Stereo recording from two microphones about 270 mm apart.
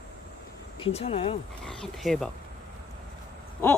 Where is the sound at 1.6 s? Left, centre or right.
Centre.